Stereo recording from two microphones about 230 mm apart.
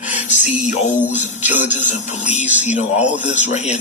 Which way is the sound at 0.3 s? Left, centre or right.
Left.